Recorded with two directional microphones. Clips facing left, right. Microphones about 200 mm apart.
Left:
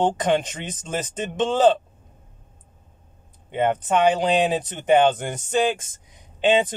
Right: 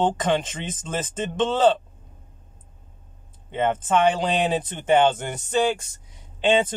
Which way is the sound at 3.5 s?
15° left (ahead or behind).